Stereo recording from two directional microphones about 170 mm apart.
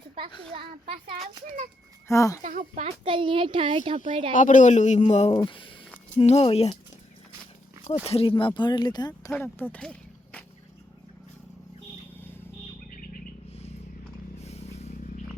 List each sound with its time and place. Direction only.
0.5 s a child's voice: 30° right (ahead or behind)
2.0 s speech: 20° left (ahead or behind)
2.4 s speech: 50° right (ahead or behind)
2.8 s a child's voice: 30° right (ahead or behind)
4.4 s a man's voice: 50° left (ahead or behind)
8.0 s speech: 35° left (ahead or behind)
9.4 s speech: 10° left (ahead or behind)
14.3 s a sound: 40° left (ahead or behind)